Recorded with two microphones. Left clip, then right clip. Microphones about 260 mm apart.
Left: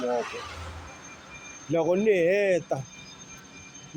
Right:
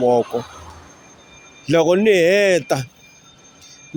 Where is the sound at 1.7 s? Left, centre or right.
Right.